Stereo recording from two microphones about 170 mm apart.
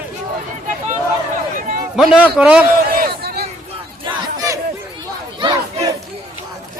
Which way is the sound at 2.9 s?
60° right (ahead or behind).